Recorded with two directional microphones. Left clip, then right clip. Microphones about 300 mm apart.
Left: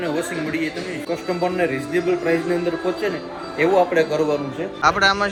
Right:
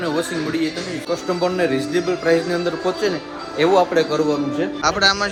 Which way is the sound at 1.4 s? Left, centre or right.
Centre.